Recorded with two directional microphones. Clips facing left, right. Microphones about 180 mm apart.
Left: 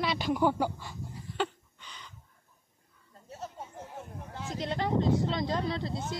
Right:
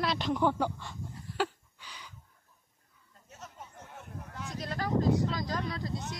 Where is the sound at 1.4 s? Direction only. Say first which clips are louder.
Even; 10° right (ahead or behind).